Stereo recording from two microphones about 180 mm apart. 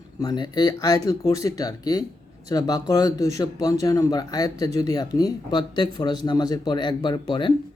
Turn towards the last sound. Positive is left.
turn(degrees=25)  # may be behind; listen again after turning